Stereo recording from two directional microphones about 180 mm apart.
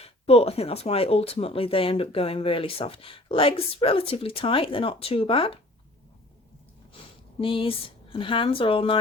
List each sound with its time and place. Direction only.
0.0 s speech: 35° left (ahead or behind)
7.3 s speech: 30° left (ahead or behind)